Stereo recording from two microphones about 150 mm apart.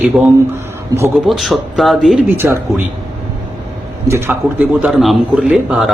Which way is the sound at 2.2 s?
15° right (ahead or behind).